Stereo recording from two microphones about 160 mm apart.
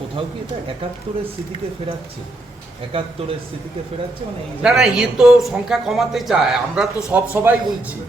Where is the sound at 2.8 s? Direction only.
35° right (ahead or behind).